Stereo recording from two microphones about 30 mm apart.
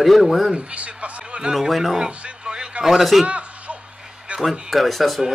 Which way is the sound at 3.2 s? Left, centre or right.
Right.